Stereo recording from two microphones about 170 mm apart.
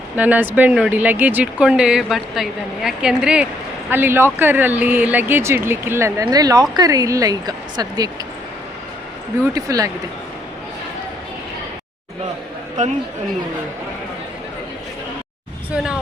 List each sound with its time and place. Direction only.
0.2 s speech: 10° right (ahead or behind)
9.6 s speech: 20° right (ahead or behind)
15.7 s speech: 5° right (ahead or behind)